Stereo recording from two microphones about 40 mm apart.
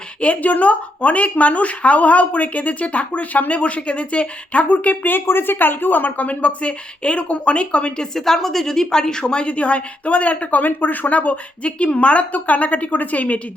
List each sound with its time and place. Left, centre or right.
0.2 s speech: left
5.2 s speech: left
8.1 s a woman's voice: centre; by 10.6 s left
10.6 s speech: left